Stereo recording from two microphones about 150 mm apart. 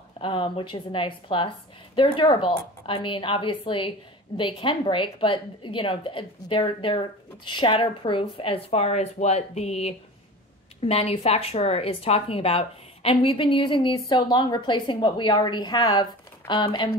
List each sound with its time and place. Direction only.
0.2 s a woman's voice: 35° left (ahead or behind)